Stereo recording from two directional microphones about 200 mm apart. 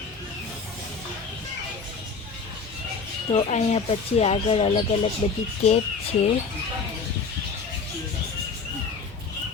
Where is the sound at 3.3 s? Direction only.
30° left (ahead or behind).